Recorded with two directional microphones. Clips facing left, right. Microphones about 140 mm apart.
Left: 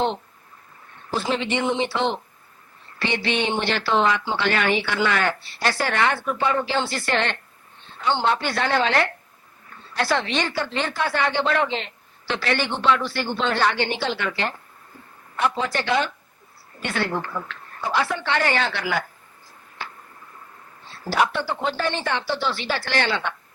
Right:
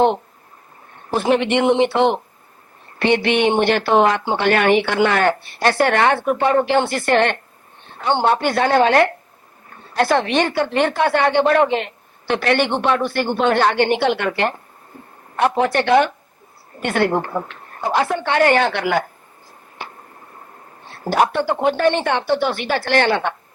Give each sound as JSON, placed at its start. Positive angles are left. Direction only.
{"t": 1.1, "sound": "a man's voice", "side_deg": -60}
{"t": 20.8, "sound": "speech", "side_deg": -55}